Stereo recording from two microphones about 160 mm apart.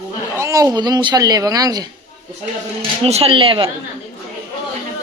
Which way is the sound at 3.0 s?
40° right (ahead or behind).